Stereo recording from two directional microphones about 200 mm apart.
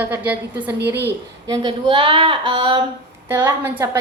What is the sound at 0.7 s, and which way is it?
Speech, 55° right (ahead or behind).